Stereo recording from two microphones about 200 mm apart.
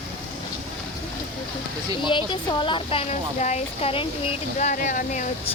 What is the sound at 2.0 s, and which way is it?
Speech, 25° left (ahead or behind).